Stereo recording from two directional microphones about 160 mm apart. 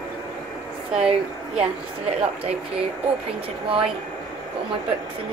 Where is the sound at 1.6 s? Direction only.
40° right (ahead or behind).